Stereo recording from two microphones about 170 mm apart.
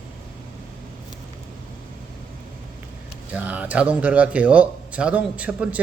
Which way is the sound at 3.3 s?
10° right (ahead or behind).